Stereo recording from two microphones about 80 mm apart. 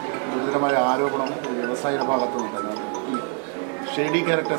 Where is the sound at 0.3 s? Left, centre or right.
Right.